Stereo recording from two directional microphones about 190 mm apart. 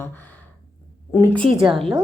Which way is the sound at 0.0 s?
10° left (ahead or behind).